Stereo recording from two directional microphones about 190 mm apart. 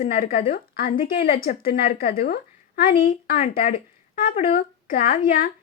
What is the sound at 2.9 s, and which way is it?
A woman's voice, 35° left (ahead or behind).